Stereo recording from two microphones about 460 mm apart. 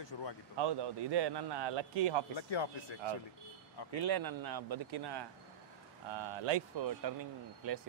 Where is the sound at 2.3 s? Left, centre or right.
Left.